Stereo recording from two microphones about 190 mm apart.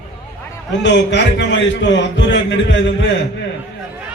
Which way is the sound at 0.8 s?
65° left (ahead or behind).